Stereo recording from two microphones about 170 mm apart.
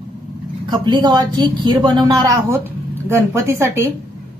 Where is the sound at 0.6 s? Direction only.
25° right (ahead or behind).